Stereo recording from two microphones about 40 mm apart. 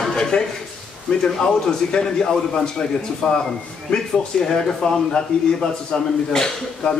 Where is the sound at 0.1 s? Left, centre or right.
Centre.